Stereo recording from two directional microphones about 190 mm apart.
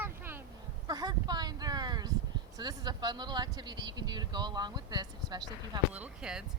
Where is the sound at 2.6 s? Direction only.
20° right (ahead or behind).